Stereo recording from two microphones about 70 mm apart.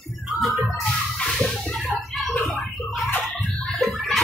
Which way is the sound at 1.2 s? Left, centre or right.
Centre.